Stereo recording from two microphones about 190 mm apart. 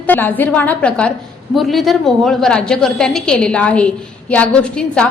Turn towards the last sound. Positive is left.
turn(degrees=5)  # may be behind; listen again after turning